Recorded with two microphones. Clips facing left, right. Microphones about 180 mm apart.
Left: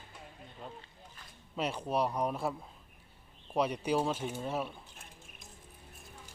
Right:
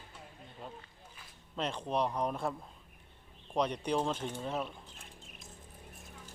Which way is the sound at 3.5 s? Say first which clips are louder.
Left 1 dB; 5° left (ahead or behind).